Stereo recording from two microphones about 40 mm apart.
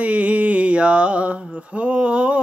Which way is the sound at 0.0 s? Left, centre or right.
Right.